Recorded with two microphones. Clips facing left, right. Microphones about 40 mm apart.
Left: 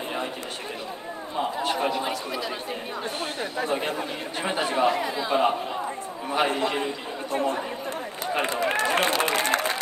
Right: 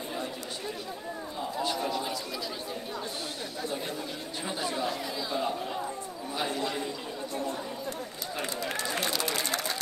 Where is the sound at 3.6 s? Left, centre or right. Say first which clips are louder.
Left 7 dB; left.